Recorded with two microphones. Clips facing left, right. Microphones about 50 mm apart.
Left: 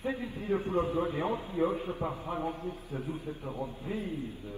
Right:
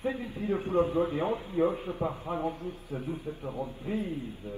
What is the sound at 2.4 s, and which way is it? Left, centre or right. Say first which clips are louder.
Speech: right 2 dB; left.